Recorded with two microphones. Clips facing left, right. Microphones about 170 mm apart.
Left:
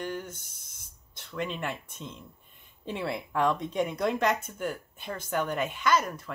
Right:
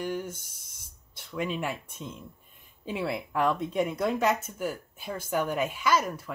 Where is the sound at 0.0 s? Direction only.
10° right (ahead or behind).